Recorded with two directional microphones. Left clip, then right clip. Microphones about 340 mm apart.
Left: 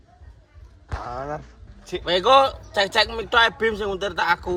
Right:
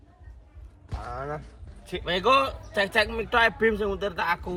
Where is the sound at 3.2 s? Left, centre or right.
Left.